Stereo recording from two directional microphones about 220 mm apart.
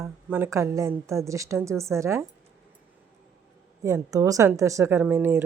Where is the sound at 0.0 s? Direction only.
10° right (ahead or behind).